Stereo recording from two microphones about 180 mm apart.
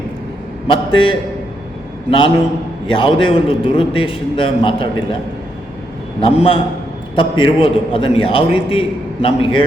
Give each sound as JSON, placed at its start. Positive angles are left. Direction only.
{"t": 0.9, "sound": "a man's voice", "side_deg": 30}
{"t": 6.1, "sound": "a man's voice", "side_deg": 30}